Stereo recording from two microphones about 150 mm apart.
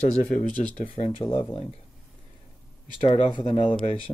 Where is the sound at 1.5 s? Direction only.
35° left (ahead or behind).